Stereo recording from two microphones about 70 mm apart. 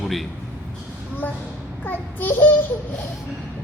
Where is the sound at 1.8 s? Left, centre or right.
Left.